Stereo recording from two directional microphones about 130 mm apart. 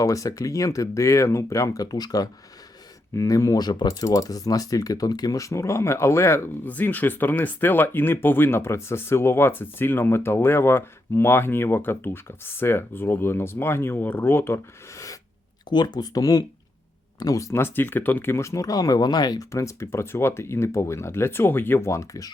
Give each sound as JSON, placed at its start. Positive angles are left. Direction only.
{"t": 0.0, "sound": "speech", "side_deg": 25}